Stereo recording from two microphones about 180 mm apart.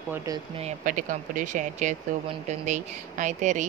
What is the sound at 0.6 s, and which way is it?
Speech, 40° right (ahead or behind).